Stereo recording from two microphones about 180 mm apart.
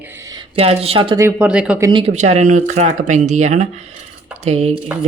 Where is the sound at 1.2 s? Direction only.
5° right (ahead or behind).